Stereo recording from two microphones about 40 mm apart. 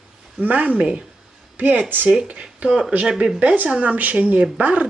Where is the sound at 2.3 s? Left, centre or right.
Right.